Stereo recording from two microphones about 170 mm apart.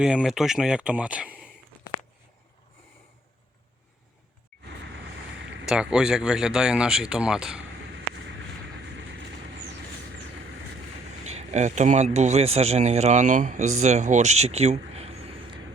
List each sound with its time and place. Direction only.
0.0 s speech: 5° right (ahead or behind)
5.6 s speech: 5° right (ahead or behind)
11.2 s speech: 40° right (ahead or behind)